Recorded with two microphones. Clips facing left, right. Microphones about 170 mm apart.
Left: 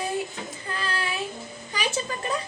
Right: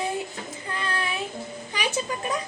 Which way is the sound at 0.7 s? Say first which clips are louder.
Right 1 dB; 20° right (ahead or behind).